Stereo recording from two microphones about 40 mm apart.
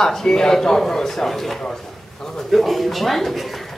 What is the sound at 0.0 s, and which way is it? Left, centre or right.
A man's voice, centre.